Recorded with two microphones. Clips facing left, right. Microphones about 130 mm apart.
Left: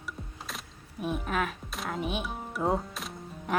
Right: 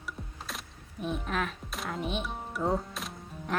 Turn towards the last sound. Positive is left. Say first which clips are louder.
# left 2 dB
turn(degrees=0)  # may be behind; listen again after turning